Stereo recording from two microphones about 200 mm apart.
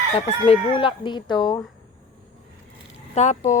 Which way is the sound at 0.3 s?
30° left (ahead or behind).